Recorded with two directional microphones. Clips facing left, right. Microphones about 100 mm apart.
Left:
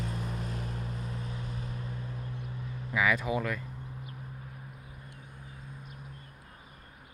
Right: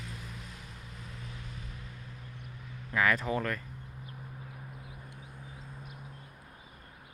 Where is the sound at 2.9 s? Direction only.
5° left (ahead or behind).